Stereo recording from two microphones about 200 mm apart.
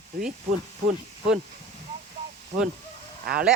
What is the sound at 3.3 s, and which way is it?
Speech, 50° right (ahead or behind).